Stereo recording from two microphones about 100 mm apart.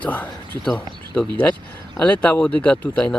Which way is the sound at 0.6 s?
5° left (ahead or behind).